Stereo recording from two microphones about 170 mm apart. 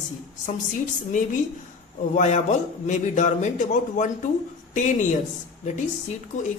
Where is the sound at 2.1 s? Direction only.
40° left (ahead or behind).